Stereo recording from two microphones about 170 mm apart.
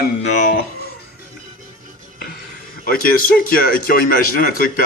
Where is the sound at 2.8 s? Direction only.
60° left (ahead or behind).